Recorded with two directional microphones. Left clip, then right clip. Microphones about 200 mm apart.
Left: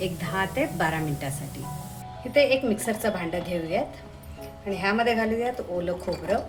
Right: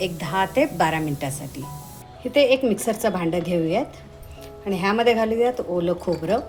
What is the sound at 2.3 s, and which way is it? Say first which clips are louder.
Speech: right 3 dB; 35° right (ahead or behind).